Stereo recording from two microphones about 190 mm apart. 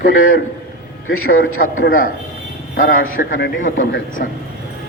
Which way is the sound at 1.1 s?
90° left.